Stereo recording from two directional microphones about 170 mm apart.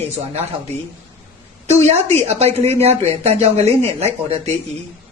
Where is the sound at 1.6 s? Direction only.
40° right (ahead or behind).